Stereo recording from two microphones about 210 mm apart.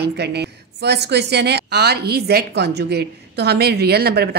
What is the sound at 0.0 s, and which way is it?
Speech, 50° right (ahead or behind).